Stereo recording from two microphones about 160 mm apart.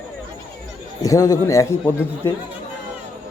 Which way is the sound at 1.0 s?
20° left (ahead or behind).